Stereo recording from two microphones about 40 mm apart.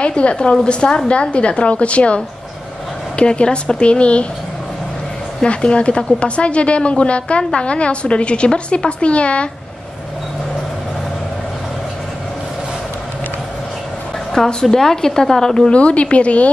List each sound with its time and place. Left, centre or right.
0.0 s a woman's voice: left
5.4 s a woman's voice: left
14.3 s a woman's voice: centre
15.7 s a woman's voice: left